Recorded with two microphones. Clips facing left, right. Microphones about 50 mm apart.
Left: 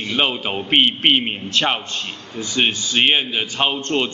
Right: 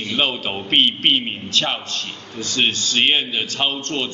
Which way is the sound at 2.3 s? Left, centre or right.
Centre.